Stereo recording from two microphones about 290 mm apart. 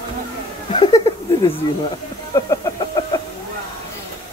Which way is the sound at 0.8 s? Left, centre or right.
Centre.